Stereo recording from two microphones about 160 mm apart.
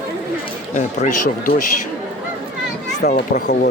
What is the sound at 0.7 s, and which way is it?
Speech, 50° left (ahead or behind).